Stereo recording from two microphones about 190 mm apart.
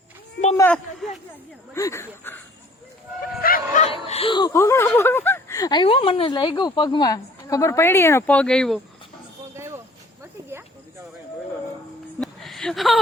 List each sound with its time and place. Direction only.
0.5 s speech: 10° left (ahead or behind)
1.0 s speech: centre (ahead or behind)
1.7 s speech: 15° left (ahead or behind)
3.4 s bow-wow: 50° left (ahead or behind)
3.8 s speech: 30° left (ahead or behind); by 8.8 s 5° left (ahead or behind)
9.6 s a sound: 15° right (ahead or behind)
12.2 s a sound: centre (ahead or behind)